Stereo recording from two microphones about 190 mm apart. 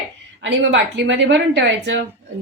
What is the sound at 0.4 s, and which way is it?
Speech, 75° right (ahead or behind).